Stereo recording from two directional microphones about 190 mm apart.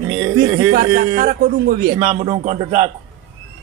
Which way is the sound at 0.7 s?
50° right (ahead or behind).